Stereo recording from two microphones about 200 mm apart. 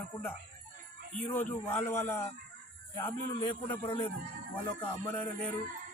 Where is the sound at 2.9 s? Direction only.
25° left (ahead or behind).